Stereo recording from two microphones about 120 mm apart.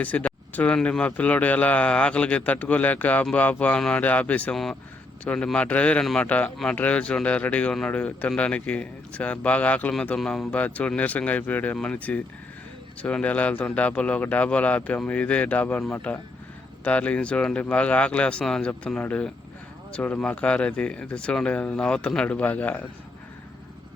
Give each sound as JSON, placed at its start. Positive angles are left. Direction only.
{"t": 0.0, "sound": "speech", "side_deg": 10}
{"t": 4.5, "sound": "speech", "side_deg": 0}